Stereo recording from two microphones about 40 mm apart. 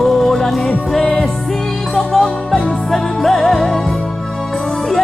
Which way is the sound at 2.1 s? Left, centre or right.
Centre.